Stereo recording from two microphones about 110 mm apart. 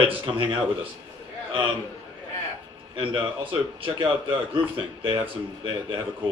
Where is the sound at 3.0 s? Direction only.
50° right (ahead or behind).